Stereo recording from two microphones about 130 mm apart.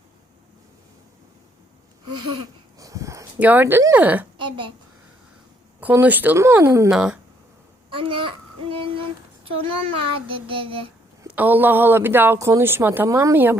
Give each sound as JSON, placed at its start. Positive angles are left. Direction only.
{"t": 2.1, "sound": "a sound", "side_deg": -30}
{"t": 3.3, "sound": "speech", "side_deg": -15}
{"t": 4.4, "sound": "a sound", "side_deg": -40}
{"t": 5.8, "sound": "speech", "side_deg": -15}
{"t": 6.9, "sound": "speech", "side_deg": -5}
{"t": 7.9, "sound": "a child's voice", "side_deg": -45}
{"t": 11.3, "sound": "speech", "side_deg": -15}